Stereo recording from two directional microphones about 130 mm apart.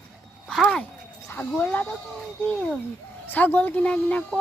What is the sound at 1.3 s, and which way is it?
Speech, 15° left (ahead or behind).